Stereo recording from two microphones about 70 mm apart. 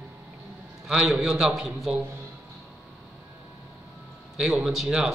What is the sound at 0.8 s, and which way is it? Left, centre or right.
A man's voice, centre.